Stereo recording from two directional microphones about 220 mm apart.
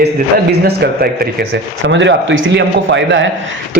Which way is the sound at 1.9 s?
55° right (ahead or behind).